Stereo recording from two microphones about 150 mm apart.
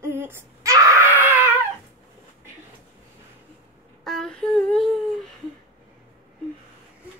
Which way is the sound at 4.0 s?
Centre (ahead or behind).